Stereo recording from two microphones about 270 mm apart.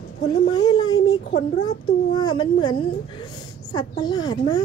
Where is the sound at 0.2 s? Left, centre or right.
Centre.